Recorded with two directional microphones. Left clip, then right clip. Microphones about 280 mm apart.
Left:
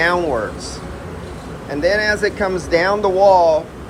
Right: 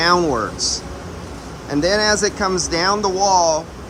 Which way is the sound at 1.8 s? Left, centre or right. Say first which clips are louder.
Left 1 dB; centre.